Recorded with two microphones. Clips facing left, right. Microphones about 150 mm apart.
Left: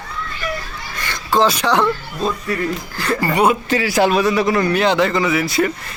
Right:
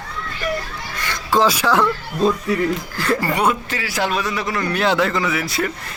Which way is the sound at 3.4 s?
20° left (ahead or behind).